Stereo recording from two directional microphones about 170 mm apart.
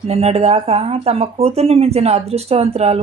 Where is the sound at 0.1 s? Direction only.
40° right (ahead or behind).